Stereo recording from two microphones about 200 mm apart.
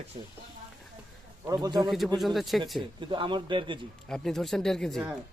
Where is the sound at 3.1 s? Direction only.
25° right (ahead or behind).